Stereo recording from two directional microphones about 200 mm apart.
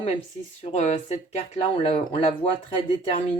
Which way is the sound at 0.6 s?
35° left (ahead or behind).